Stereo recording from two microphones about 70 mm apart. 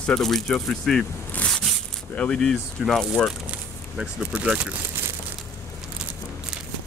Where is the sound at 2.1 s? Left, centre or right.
Centre.